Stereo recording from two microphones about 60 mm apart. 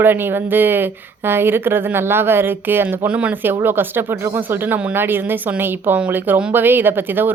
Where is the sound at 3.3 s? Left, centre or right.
Right.